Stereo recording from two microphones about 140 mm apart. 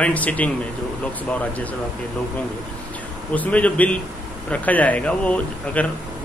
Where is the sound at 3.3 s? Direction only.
10° left (ahead or behind).